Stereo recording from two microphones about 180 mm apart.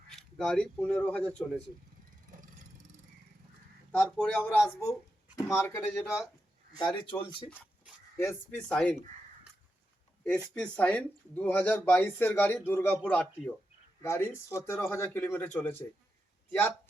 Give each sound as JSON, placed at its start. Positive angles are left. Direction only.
{"t": 0.1, "sound": "speech", "side_deg": 5}
{"t": 3.9, "sound": "speech", "side_deg": 5}
{"t": 6.7, "sound": "speech", "side_deg": 25}
{"t": 8.2, "sound": "speech", "side_deg": 10}
{"t": 10.5, "sound": "speech", "side_deg": 5}